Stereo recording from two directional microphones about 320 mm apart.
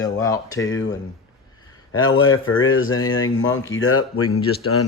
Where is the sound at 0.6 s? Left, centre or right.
Left.